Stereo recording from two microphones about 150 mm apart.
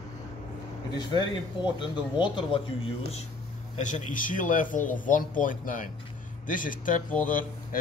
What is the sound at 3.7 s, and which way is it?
Speech, 55° left (ahead or behind).